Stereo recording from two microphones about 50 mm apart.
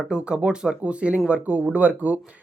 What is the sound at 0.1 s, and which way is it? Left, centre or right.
Speech, right.